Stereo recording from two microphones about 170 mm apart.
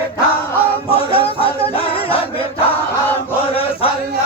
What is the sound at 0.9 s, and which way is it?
Music, 35° left (ahead or behind).